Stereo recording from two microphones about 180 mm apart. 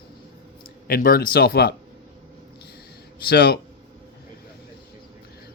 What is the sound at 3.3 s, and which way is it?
Speech, 60° left (ahead or behind).